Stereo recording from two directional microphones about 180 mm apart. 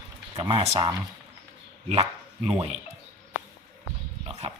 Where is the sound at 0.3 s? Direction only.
25° right (ahead or behind).